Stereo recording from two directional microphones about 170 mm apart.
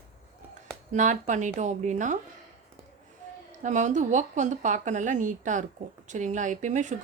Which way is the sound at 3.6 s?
45° right (ahead or behind).